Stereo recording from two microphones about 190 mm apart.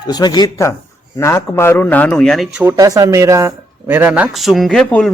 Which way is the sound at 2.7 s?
20° right (ahead or behind).